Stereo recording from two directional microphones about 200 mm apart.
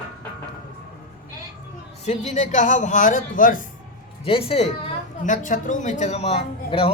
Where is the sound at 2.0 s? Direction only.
35° left (ahead or behind).